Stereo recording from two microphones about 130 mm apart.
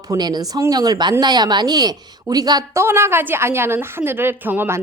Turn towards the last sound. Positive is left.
turn(degrees=-15)  # may be behind; listen again after turning